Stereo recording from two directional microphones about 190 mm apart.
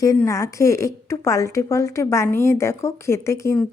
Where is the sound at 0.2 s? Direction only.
15° left (ahead or behind).